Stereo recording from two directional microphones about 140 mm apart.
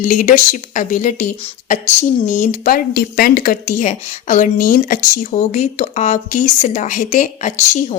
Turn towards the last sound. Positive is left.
turn(degrees=60)  # may be behind; listen again after turning